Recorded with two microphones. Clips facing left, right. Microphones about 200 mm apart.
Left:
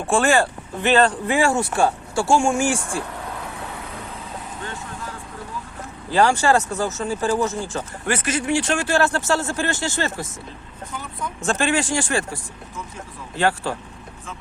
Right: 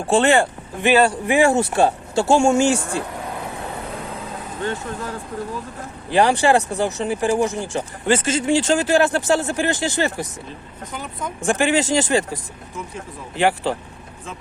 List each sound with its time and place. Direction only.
0.1 s speech: 20° right (ahead or behind)
6.1 s speech: 15° right (ahead or behind)
11.3 s speech: 15° right (ahead or behind)